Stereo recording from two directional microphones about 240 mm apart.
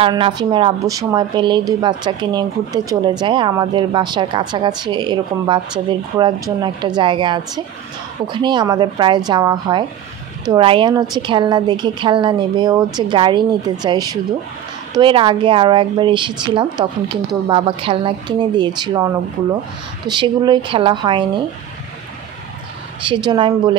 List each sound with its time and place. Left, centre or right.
0.0 s a woman's voice: centre
23.0 s a woman's voice: centre